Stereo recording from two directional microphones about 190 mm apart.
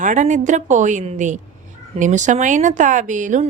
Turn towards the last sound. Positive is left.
turn(degrees=-40)  # may be behind; listen again after turning